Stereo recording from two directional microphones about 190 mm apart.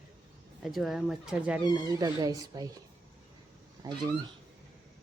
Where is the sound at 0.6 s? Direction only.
Centre (ahead or behind).